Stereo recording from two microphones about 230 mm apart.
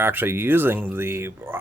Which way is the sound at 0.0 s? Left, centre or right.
Centre.